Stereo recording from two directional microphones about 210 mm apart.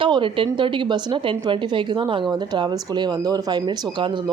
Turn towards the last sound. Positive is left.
turn(degrees=-25)  # may be behind; listen again after turning